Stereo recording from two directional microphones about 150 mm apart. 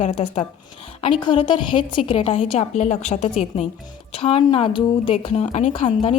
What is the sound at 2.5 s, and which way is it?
Speech, 50° left (ahead or behind).